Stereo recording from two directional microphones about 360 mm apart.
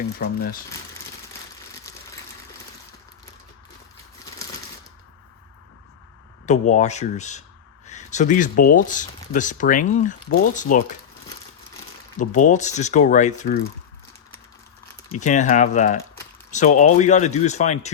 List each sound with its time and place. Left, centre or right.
0.2 s speech: left
6.4 s speech: centre
12.2 s speech: left
15.2 s speech: centre